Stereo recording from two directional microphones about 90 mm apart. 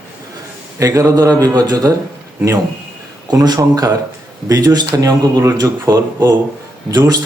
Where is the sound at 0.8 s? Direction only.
35° right (ahead or behind).